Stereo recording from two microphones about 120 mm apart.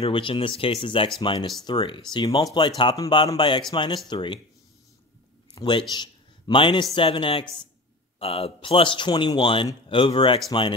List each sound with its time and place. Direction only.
0.0 s a man's voice: 45° left (ahead or behind)
5.5 s a man's voice: 40° left (ahead or behind)